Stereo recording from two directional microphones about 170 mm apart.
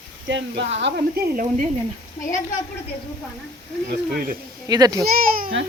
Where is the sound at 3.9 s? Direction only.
60° right (ahead or behind).